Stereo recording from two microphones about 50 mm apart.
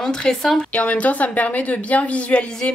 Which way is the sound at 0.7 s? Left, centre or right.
Left.